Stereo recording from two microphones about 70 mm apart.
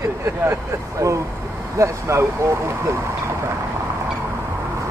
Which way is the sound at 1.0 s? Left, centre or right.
Right.